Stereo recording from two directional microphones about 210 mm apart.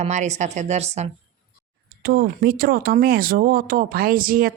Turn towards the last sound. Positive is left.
turn(degrees=-40)  # may be behind; listen again after turning